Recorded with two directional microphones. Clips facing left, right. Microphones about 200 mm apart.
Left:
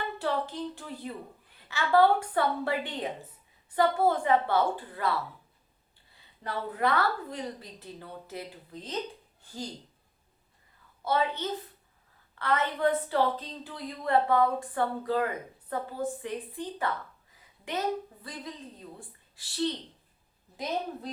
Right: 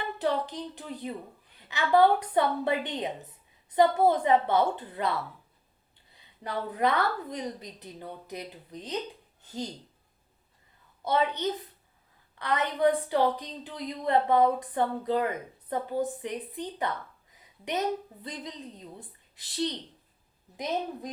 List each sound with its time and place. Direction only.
0.2 s speech: 15° right (ahead or behind)
6.1 s a woman's voice: 15° right (ahead or behind)
11.0 s a woman's voice: 20° right (ahead or behind)